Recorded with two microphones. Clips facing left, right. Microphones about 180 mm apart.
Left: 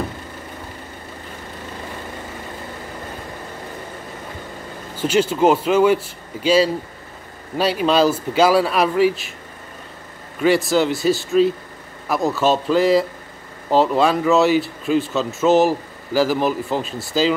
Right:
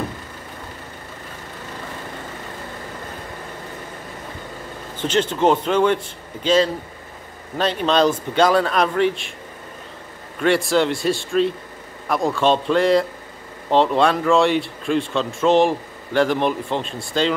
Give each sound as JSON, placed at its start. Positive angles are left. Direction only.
{"t": 4.9, "sound": "speech", "side_deg": 10}
{"t": 10.4, "sound": "speech", "side_deg": 0}